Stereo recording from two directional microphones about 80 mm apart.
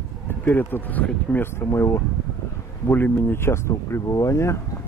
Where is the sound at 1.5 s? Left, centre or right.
Left.